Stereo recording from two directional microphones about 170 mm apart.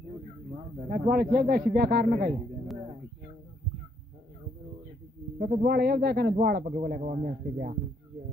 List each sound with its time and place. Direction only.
0.8 s speech: 55° right (ahead or behind)
5.6 s speech: 65° right (ahead or behind)
7.0 s a man's voice: 50° right (ahead or behind)